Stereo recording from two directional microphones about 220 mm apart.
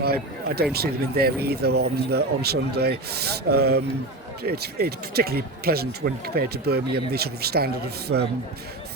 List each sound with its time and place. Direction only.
0.0 s speech: 45° right (ahead or behind)